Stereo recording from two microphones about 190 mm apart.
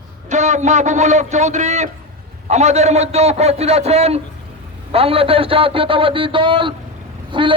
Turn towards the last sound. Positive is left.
turn(degrees=-25)  # may be behind; listen again after turning